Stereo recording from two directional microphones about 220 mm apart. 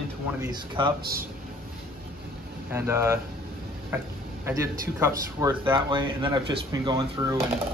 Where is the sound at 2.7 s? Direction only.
10° right (ahead or behind).